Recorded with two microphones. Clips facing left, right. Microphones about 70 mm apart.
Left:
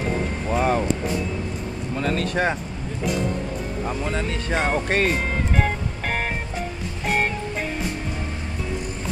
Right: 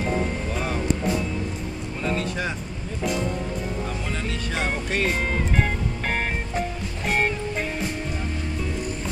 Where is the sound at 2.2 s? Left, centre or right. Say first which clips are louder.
Left 5 dB; left.